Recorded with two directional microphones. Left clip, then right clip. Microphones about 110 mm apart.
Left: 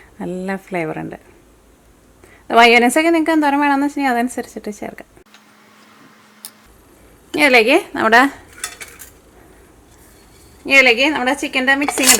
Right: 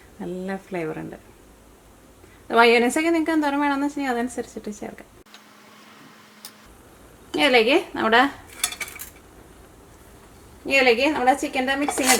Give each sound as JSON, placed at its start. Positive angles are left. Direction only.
{"t": 0.2, "sound": "a woman's voice", "side_deg": 45}
{"t": 2.5, "sound": "a woman's voice", "side_deg": 40}
{"t": 7.3, "sound": "a woman's voice", "side_deg": 40}
{"t": 10.7, "sound": "a woman's voice", "side_deg": 45}